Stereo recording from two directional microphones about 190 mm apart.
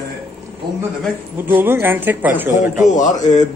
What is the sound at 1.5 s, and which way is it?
Speech, 10° right (ahead or behind).